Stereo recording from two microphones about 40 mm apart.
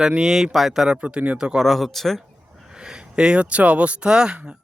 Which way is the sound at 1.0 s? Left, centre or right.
Right.